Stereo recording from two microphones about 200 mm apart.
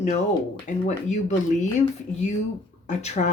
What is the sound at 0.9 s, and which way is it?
Speech, 35° left (ahead or behind).